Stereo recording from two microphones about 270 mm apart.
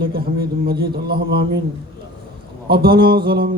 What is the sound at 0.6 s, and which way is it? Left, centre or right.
A man's voice, right.